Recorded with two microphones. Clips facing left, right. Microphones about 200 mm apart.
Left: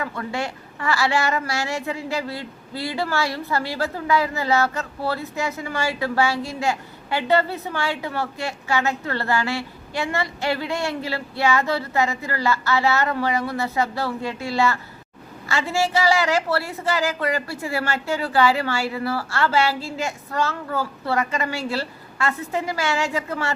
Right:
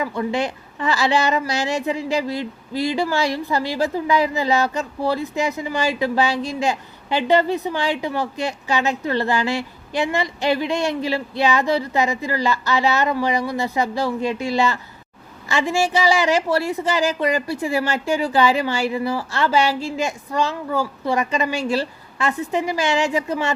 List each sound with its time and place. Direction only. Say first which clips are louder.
0.0 s a woman's voice: right 5 dB; 15° right (ahead or behind)